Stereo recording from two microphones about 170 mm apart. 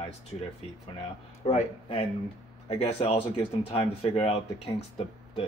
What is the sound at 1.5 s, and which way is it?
Speech, 35° left (ahead or behind).